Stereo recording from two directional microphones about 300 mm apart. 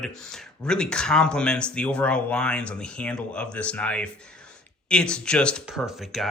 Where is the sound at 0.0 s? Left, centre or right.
Centre.